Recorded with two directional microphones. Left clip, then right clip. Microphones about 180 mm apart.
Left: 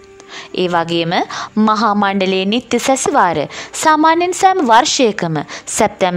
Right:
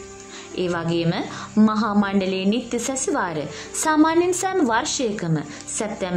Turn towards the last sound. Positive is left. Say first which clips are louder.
# left 13 dB
turn(degrees=50)  # may be behind; listen again after turning